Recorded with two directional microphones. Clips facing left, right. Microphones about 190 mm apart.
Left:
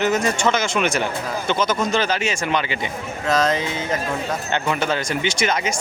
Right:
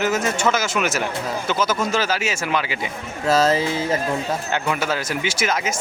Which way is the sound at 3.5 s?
30° right (ahead or behind).